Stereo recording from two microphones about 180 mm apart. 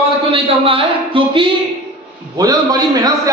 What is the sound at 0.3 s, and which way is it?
A man's voice, 30° right (ahead or behind).